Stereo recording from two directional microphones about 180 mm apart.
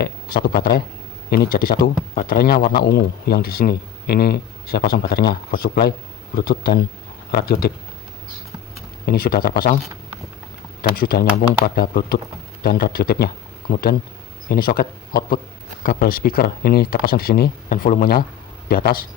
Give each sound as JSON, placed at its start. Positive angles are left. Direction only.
{"t": 0.0, "sound": "a man's voice", "side_deg": 55}
{"t": 9.0, "sound": "a man's voice", "side_deg": 55}
{"t": 10.9, "sound": "a man's voice", "side_deg": 55}